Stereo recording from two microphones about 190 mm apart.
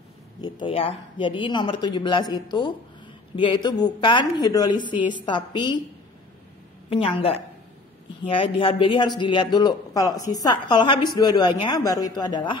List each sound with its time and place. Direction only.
0.4 s a man's voice: 25° left (ahead or behind)
6.9 s a woman's voice: 30° left (ahead or behind)